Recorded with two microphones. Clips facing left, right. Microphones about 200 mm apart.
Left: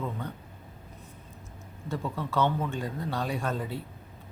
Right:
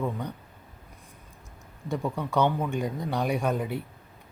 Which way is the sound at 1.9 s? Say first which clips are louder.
Right 3 dB; 15° right (ahead or behind).